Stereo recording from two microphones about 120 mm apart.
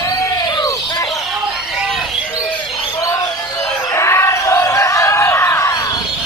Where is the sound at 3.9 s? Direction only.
25° left (ahead or behind).